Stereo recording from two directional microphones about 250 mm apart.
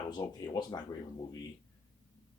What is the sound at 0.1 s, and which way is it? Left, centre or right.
Speech, centre.